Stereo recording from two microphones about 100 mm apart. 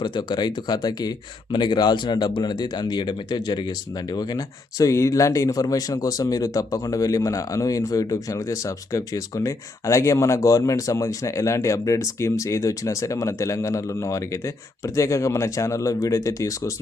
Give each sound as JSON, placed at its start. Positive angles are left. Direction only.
{"t": 0.0, "sound": "speech", "side_deg": 50}